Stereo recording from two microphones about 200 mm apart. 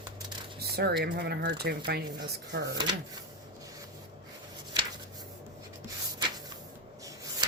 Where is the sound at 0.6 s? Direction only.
55° right (ahead or behind).